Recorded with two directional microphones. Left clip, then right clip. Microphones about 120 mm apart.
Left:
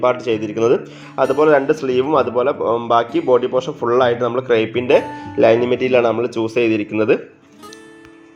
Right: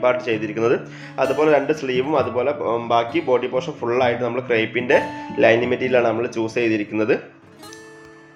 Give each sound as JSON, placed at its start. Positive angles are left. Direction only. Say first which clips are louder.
{"t": 0.0, "sound": "speech", "louder": "left 2 dB", "side_deg": 40}